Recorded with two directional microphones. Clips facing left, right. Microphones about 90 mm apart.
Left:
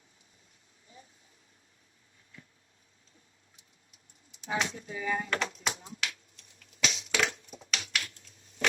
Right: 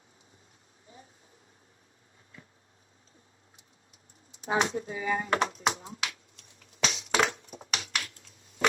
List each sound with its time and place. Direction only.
4.3 s speech: 40° right (ahead or behind)
6.7 s finger snapping: 40° right (ahead or behind)